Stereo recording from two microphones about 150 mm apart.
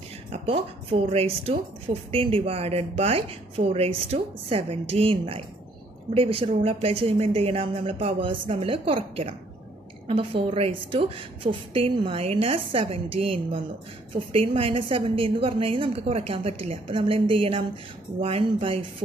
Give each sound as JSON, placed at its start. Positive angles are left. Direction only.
{"t": 0.3, "sound": "a woman's voice", "side_deg": -40}